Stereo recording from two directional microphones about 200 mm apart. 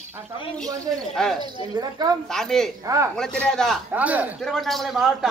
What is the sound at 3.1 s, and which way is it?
A man's voice, 5° left (ahead or behind).